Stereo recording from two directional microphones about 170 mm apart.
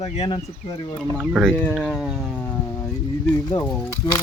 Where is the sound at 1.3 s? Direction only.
5° left (ahead or behind).